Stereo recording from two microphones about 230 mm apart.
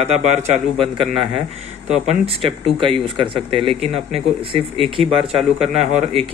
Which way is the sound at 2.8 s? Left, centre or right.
Right.